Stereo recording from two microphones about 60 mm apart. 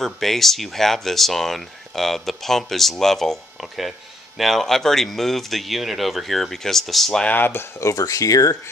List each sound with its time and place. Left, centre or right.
0.0 s speech: centre
7.2 s speech: left
7.9 s speech: left